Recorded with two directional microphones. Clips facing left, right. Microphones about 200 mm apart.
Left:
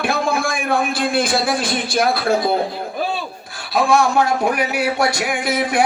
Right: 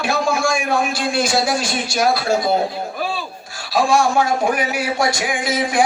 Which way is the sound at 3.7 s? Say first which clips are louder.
Even; 60° left (ahead or behind).